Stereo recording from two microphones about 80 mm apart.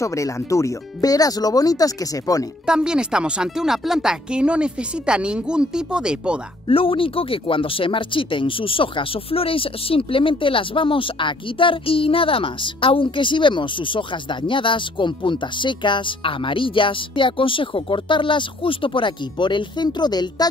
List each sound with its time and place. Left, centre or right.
0.0 s speech: left
2.6 s speech: centre
7.0 s speech: left
10.1 s speech: left